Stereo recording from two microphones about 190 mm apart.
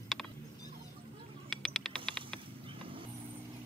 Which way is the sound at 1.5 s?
Centre (ahead or behind).